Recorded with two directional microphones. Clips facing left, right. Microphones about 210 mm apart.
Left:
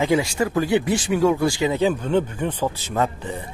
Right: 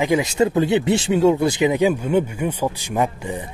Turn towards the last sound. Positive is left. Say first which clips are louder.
# right 2 dB
turn(degrees=-15)  # may be behind; listen again after turning